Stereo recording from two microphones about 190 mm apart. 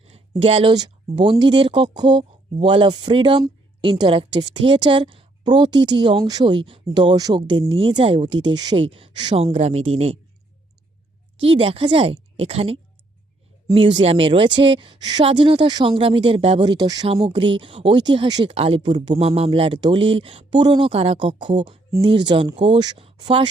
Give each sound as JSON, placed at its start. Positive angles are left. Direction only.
{"t": 0.0, "sound": "speech", "side_deg": -30}
{"t": 11.3, "sound": "speech", "side_deg": -30}